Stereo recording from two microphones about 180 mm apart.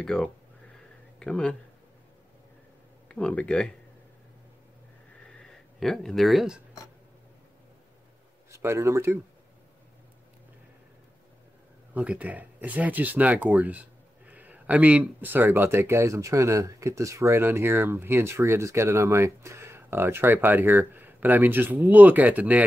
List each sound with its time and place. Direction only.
0.0 s speech: 5° left (ahead or behind)
3.1 s speech: 5° left (ahead or behind)
5.2 s a sound: centre (ahead or behind)
8.5 s speech: 15° right (ahead or behind)
11.9 s speech: 10° right (ahead or behind)